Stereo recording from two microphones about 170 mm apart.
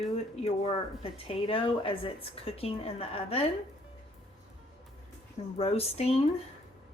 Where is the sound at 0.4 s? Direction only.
35° left (ahead or behind).